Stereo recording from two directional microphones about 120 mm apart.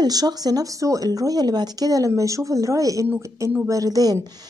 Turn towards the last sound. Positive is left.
turn(degrees=-35)  # may be behind; listen again after turning